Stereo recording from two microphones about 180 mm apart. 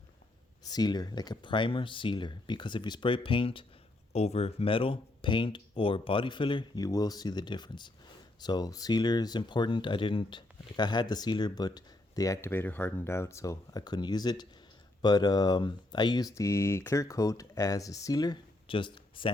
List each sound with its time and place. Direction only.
0.6 s speech: 20° left (ahead or behind)